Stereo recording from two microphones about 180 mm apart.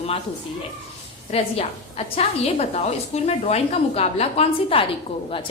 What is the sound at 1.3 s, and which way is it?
A woman's voice, 35° left (ahead or behind).